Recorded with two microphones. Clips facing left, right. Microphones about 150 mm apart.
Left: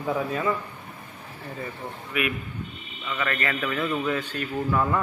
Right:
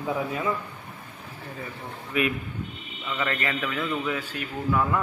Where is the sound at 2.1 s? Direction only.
30° right (ahead or behind).